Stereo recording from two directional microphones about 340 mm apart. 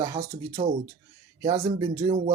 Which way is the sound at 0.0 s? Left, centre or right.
Centre.